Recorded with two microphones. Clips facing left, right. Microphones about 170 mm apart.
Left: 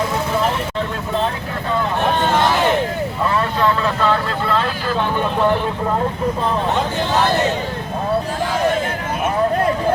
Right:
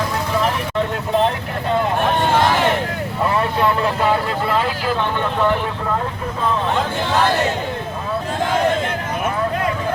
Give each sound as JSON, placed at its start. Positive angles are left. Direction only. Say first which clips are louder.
{"t": 3.3, "sound": "vehicle", "louder": "even", "side_deg": -20}